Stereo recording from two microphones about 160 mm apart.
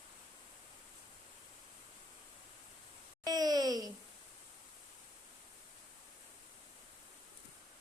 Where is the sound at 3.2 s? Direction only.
25° right (ahead or behind).